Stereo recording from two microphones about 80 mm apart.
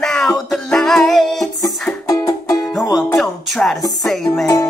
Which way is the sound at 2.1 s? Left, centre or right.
Left.